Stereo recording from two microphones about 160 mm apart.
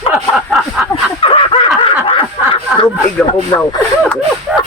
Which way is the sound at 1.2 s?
35° left (ahead or behind).